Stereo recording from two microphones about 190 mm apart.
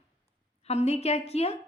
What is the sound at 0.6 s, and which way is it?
Speech, 35° left (ahead or behind).